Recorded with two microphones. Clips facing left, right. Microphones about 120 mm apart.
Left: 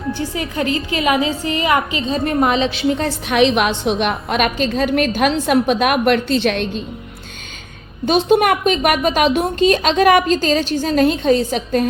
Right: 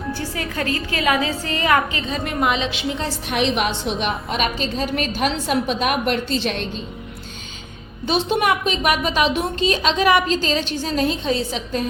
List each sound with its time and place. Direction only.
0.1 s a woman's voice: 20° left (ahead or behind)
2.1 s a woman's voice: 40° left (ahead or behind)
3.2 s a woman's voice: 90° left; by 6.7 s 60° left (ahead or behind)
8.0 s a woman's voice: 50° left (ahead or behind)